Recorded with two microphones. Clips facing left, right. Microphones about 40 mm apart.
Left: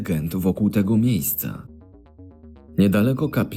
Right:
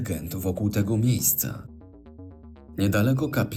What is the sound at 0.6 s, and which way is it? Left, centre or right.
Speech, left.